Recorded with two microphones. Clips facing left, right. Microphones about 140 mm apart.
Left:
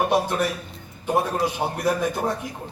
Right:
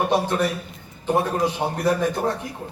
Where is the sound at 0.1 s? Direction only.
10° left (ahead or behind).